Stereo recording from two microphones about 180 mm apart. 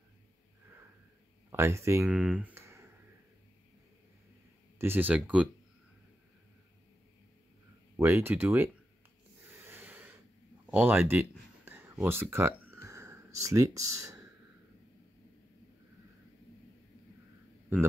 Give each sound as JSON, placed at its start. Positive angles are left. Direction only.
{"t": 1.5, "sound": "speech", "side_deg": -15}
{"t": 2.1, "sound": "a sound", "side_deg": -5}
{"t": 4.7, "sound": "speech", "side_deg": -10}
{"t": 7.9, "sound": "speech", "side_deg": -10}
{"t": 9.6, "sound": "snort", "side_deg": -10}
{"t": 10.7, "sound": "a sound", "side_deg": -10}